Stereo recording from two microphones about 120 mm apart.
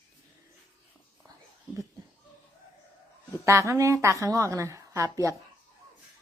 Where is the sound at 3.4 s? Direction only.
25° right (ahead or behind).